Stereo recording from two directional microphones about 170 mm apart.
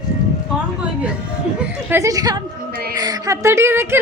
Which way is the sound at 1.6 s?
10° right (ahead or behind).